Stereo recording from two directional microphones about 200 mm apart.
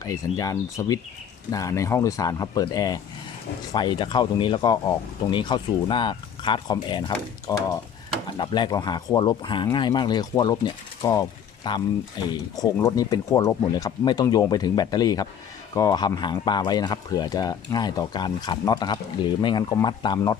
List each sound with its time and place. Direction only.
0.0 s speech: 15° left (ahead or behind)